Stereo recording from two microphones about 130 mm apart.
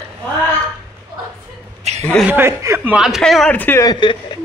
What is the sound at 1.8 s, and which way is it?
Chuckle, 60° right (ahead or behind).